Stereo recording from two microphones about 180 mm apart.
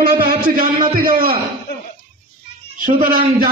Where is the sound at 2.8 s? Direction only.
50° right (ahead or behind).